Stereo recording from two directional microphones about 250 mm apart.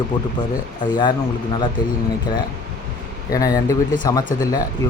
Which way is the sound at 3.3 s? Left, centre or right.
Centre.